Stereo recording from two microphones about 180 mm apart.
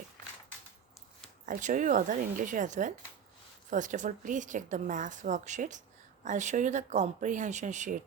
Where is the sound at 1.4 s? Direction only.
45° right (ahead or behind).